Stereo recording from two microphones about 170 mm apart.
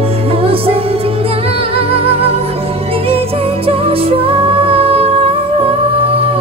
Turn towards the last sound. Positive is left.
turn(degrees=-35)  # may be behind; listen again after turning